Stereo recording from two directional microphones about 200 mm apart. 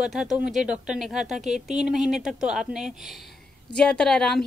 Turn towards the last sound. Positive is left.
turn(degrees=5)  # may be behind; listen again after turning